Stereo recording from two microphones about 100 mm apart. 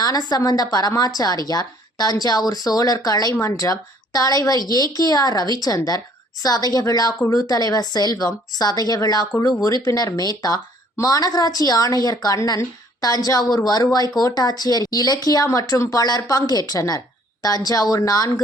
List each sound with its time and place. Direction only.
0.0 s a woman's voice: 40° left (ahead or behind)